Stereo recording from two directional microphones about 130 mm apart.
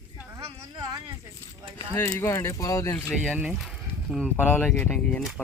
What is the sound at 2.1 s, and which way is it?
Speech, 20° left (ahead or behind).